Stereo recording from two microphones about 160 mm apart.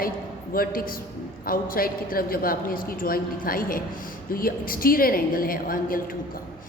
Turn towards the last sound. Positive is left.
turn(degrees=65)  # may be behind; listen again after turning